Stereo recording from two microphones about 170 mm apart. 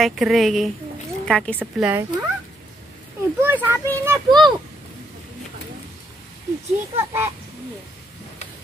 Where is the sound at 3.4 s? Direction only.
15° right (ahead or behind).